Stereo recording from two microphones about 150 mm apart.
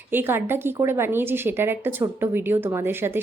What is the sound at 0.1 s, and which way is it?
A woman's voice, 15° right (ahead or behind).